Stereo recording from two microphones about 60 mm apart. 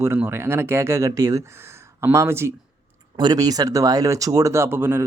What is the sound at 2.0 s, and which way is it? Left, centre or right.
Speech, right.